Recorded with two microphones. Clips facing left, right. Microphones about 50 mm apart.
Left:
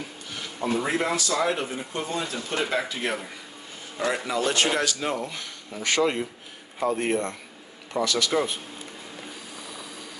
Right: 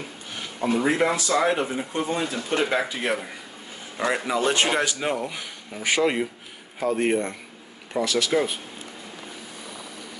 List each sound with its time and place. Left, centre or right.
0.7 s speech: centre